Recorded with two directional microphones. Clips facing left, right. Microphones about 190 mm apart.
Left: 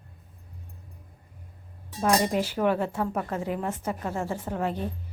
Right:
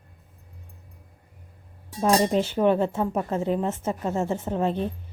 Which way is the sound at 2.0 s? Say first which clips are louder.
Right 3 dB; 25° right (ahead or behind).